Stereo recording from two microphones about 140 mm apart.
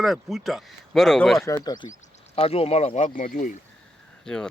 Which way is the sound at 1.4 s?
30° left (ahead or behind).